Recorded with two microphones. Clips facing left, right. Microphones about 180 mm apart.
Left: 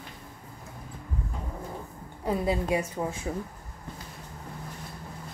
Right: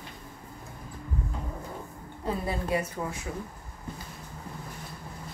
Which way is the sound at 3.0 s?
30° left (ahead or behind).